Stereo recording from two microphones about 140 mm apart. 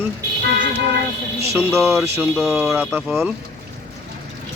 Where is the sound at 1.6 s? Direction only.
15° right (ahead or behind).